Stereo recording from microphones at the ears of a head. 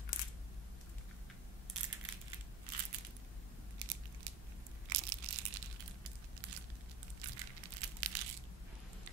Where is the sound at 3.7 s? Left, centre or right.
Right.